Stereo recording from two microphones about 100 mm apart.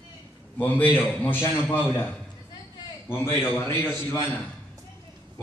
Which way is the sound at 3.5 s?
30° left (ahead or behind).